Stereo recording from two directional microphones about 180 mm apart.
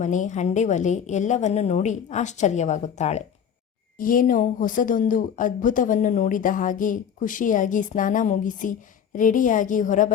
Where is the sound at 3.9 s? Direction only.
50° left (ahead or behind).